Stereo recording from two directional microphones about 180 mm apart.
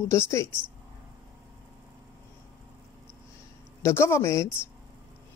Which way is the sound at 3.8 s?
15° left (ahead or behind).